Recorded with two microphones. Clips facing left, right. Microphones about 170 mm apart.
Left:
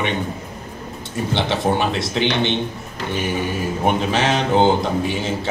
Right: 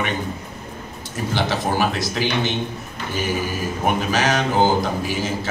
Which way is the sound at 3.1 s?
25° left (ahead or behind).